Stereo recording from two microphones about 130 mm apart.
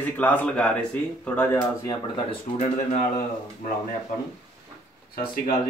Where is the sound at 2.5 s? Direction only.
70° left (ahead or behind).